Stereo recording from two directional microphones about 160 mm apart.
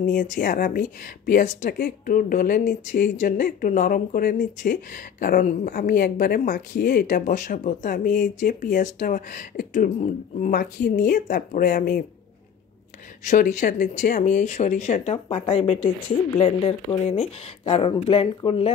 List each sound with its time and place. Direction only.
0.0 s speech: 55° left (ahead or behind)
1.8 s speech: 65° left (ahead or behind)
13.2 s speech: 50° left (ahead or behind)